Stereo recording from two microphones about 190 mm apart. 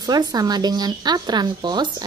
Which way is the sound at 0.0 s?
20° right (ahead or behind).